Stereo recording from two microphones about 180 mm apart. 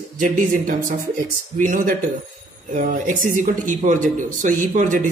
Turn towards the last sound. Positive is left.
turn(degrees=-45)  # may be behind; listen again after turning